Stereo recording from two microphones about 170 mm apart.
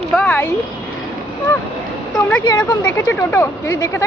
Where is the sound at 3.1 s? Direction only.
15° left (ahead or behind).